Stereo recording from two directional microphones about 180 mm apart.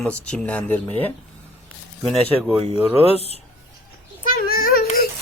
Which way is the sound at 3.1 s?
35° left (ahead or behind).